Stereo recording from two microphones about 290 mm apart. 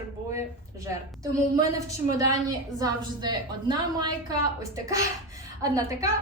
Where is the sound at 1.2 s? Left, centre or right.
Centre.